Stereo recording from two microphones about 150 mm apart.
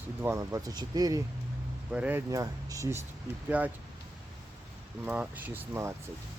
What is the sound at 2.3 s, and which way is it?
Speech, 20° right (ahead or behind).